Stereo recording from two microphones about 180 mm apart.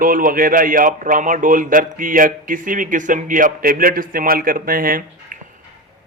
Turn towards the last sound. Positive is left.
turn(degrees=-50)  # may be behind; listen again after turning